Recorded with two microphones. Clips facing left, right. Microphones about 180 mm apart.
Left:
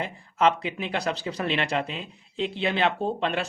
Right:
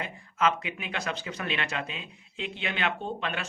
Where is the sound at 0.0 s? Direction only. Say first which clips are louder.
Left 5 dB; 30° left (ahead or behind).